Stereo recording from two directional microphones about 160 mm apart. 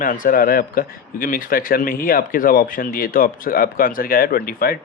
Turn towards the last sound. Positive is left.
turn(degrees=70)  # may be behind; listen again after turning